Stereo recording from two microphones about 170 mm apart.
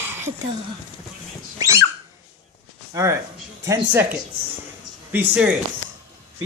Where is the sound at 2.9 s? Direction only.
20° right (ahead or behind).